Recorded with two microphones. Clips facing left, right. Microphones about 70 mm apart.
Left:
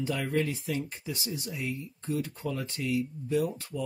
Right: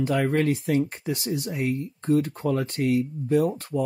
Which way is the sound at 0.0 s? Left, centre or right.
Right.